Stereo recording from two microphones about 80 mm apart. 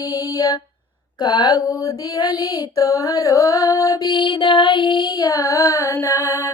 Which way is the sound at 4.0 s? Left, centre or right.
Left.